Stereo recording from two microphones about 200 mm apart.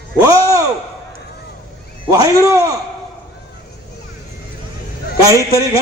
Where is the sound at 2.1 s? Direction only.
15° right (ahead or behind).